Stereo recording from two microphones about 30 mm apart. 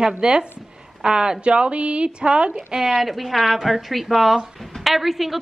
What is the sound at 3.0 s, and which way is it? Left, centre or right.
A woman's voice, centre.